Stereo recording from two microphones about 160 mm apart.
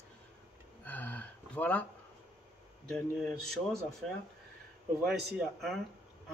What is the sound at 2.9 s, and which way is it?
Speech, 5° left (ahead or behind).